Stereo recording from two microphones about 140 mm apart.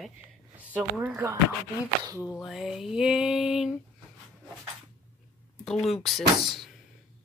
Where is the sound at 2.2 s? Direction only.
25° left (ahead or behind).